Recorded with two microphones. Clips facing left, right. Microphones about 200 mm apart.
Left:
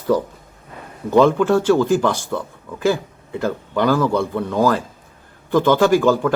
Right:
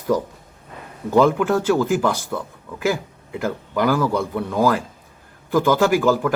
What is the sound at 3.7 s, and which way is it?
Speech, 10° right (ahead or behind).